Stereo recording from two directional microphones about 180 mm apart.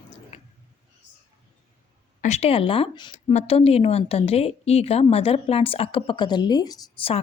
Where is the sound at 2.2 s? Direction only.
35° left (ahead or behind); by 7.1 s 20° left (ahead or behind).